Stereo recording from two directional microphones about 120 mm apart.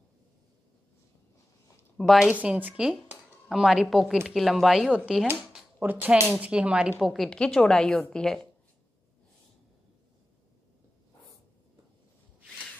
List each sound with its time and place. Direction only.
2.0 s a woman's voice: centre (ahead or behind)
2.3 s a woman's voice: 10° right (ahead or behind); by 8.5 s 5° left (ahead or behind)